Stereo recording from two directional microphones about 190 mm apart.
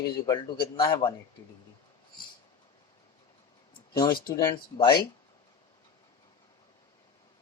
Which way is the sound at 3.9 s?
25° left (ahead or behind).